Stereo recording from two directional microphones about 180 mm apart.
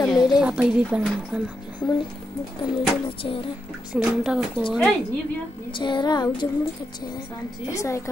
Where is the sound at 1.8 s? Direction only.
25° left (ahead or behind).